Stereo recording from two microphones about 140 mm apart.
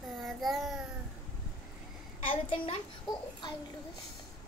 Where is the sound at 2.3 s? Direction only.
40° left (ahead or behind).